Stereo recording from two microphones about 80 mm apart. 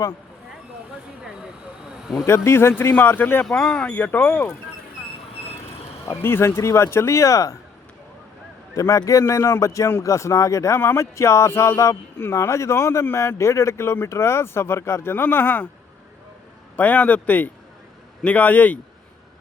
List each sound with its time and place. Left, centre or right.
1.2 s vehicle: centre
2.2 s speech: left
3.4 s speech: centre
3.9 s speech: left
6.1 s speech: left
8.7 s speech: left
16.7 s speech: left